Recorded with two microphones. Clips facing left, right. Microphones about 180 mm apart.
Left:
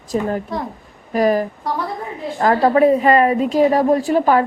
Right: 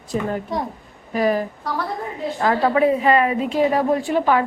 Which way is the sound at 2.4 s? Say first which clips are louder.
Left 4 dB; 40° left (ahead or behind).